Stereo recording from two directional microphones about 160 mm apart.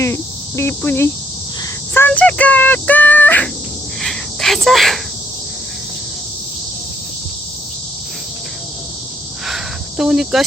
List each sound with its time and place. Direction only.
0.0 s speech: 15° left (ahead or behind)
4.0 s a sound: centre (ahead or behind)
10.0 s speech: 5° right (ahead or behind)